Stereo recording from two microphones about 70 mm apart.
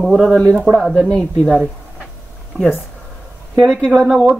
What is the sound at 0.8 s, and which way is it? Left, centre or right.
Speech, centre.